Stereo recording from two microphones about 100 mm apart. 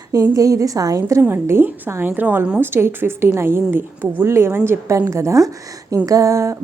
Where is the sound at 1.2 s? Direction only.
25° right (ahead or behind).